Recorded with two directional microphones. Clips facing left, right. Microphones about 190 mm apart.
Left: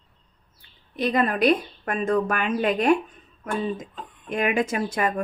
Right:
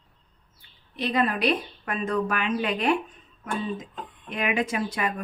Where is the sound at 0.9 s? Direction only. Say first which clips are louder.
Left 3 dB; 45° left (ahead or behind).